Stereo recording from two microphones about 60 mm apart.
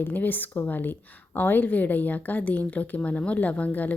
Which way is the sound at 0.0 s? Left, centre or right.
Left.